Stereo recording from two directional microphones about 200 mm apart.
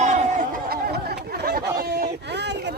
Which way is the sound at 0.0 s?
35° right (ahead or behind).